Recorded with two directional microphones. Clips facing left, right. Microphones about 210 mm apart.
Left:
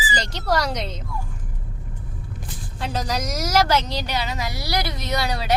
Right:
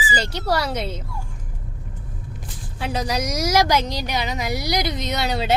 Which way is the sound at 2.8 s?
10° right (ahead or behind).